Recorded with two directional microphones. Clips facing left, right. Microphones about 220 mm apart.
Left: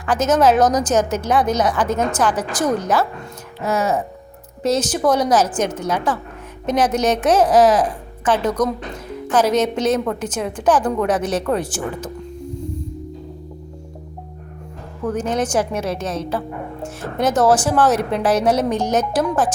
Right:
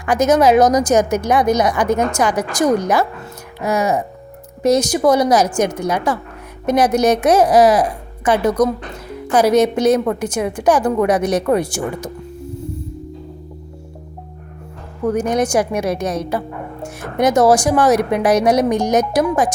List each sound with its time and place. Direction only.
0.0 s a woman's voice: 10° right (ahead or behind)
12.5 s music: 5° right (ahead or behind)
15.0 s a woman's voice: 10° right (ahead or behind)